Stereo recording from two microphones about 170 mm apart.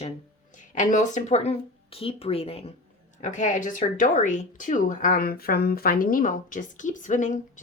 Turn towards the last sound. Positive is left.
turn(degrees=50)  # may be behind; listen again after turning